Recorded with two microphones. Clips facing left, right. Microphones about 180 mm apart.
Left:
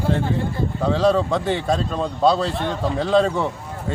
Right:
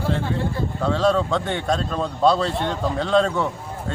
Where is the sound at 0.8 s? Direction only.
10° left (ahead or behind).